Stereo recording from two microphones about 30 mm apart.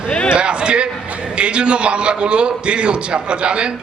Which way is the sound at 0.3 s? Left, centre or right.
Right.